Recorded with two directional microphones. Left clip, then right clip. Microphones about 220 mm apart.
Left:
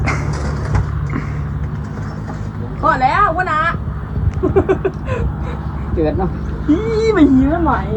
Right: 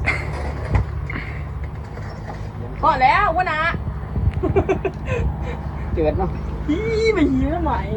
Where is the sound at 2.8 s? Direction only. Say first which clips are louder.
Left 2 dB; 50° left (ahead or behind).